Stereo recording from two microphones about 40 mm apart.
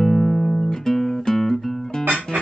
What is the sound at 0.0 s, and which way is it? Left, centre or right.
Music, centre.